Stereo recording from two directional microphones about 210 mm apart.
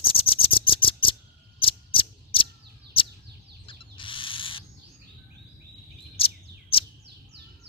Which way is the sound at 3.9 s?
25° left (ahead or behind).